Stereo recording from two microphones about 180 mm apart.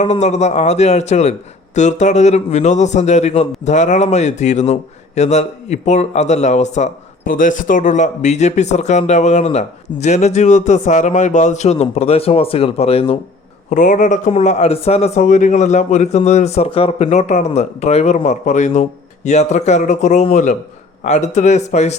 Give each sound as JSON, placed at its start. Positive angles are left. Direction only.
{"t": 0.0, "sound": "a man's voice", "side_deg": 40}
{"t": 13.7, "sound": "a man's voice", "side_deg": 45}